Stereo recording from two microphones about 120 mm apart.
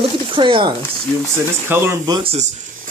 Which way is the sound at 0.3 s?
45° right (ahead or behind).